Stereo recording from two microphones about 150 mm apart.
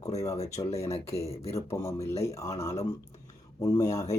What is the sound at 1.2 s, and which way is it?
Speech, 40° left (ahead or behind).